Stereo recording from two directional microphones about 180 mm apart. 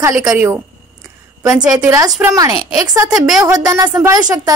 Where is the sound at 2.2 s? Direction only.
20° right (ahead or behind).